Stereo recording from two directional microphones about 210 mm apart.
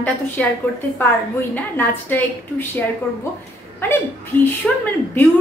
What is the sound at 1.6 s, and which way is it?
A woman's voice, 10° left (ahead or behind).